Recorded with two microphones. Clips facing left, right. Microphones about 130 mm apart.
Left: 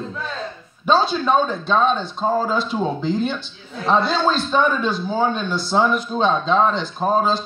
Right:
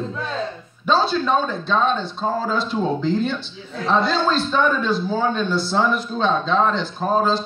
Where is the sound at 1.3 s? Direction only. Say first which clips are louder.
Left 2 dB; 5° left (ahead or behind).